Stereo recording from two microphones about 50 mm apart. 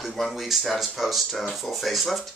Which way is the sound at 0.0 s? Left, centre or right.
Centre.